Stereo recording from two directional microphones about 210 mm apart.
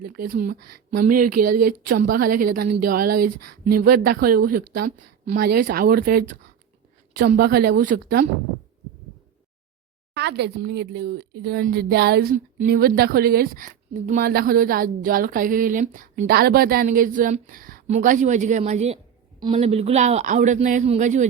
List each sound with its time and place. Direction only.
0.1 s a man's voice: 45° right (ahead or behind)
10.2 s a man's voice: 55° right (ahead or behind); by 21.2 s 35° right (ahead or behind)